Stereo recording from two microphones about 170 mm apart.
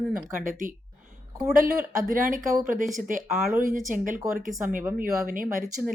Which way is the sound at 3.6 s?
50° right (ahead or behind).